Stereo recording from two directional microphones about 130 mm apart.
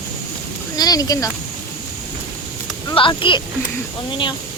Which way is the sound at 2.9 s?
40° left (ahead or behind).